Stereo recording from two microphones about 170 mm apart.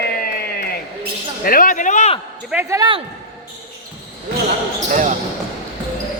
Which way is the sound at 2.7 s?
25° right (ahead or behind).